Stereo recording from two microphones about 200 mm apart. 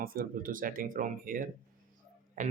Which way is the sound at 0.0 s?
45° right (ahead or behind).